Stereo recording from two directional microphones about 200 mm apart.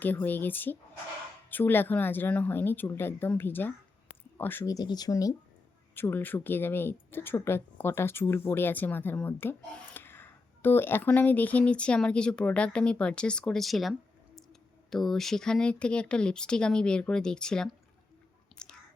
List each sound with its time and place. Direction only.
0.0 s a woman's voice: 10° left (ahead or behind)
18.5 s chewing: 5° left (ahead or behind)